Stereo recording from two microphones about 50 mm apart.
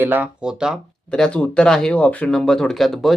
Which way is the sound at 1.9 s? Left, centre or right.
Left.